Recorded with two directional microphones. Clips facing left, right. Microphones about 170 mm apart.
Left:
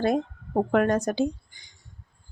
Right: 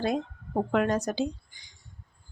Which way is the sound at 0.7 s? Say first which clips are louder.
Left 3 dB; 50° left (ahead or behind).